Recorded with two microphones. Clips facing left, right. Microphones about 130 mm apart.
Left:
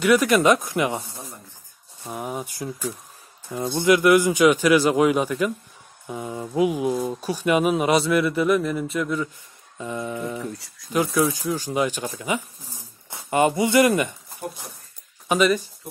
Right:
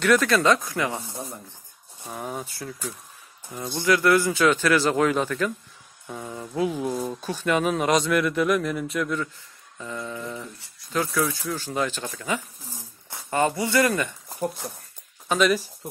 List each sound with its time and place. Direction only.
0.0 s speech: 10° left (ahead or behind)
2.0 s speech: 10° left (ahead or behind)
9.8 s speech: 20° left (ahead or behind)
10.4 s speech: 80° left
11.1 s speech: 20° left (ahead or behind)
15.2 s speech: 5° left (ahead or behind)